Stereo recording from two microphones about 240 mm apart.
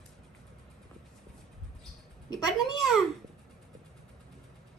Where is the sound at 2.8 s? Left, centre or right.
Centre.